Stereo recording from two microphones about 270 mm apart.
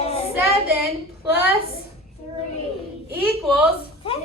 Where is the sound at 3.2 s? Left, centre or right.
Centre.